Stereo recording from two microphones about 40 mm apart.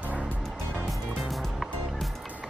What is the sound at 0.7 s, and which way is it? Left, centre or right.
Music, centre.